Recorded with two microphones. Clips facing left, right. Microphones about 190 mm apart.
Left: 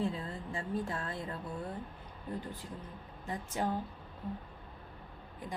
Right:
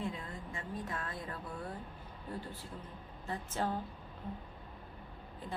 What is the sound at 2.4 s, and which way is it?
A woman's voice, 15° left (ahead or behind).